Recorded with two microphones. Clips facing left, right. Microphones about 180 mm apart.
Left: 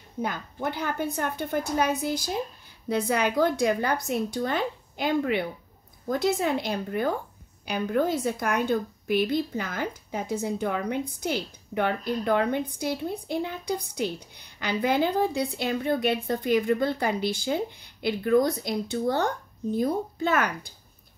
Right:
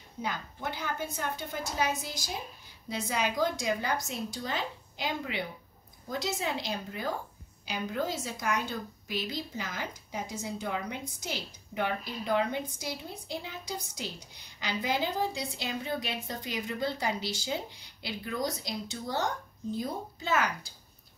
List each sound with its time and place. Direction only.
0.2 s a woman's voice: 50° left (ahead or behind)